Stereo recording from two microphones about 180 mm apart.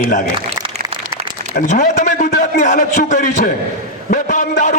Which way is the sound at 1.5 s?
40° left (ahead or behind).